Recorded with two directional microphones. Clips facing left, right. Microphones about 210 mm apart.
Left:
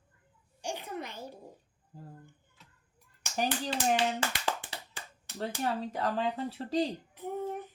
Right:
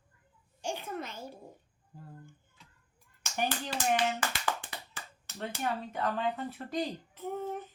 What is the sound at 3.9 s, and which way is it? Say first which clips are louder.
Clapping: right 2 dB; 25° left (ahead or behind).